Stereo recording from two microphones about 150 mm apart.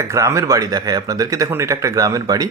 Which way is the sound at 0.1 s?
20° right (ahead or behind).